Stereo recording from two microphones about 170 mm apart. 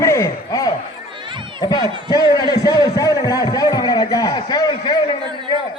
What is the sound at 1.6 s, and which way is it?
A man's voice, 20° left (ahead or behind).